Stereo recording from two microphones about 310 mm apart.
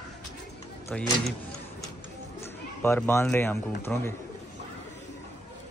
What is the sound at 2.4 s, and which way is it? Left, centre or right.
Speech, centre.